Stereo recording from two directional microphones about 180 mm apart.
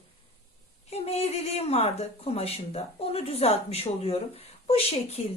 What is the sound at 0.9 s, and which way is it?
Speech, 35° left (ahead or behind).